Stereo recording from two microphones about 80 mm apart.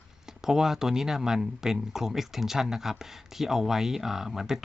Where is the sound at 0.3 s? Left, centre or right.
Centre.